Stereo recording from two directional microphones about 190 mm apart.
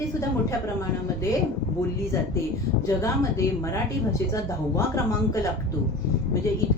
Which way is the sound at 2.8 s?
15° left (ahead or behind).